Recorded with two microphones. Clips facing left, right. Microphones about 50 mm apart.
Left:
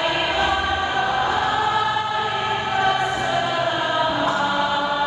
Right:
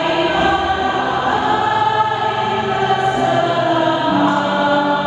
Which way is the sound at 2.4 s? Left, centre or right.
Right.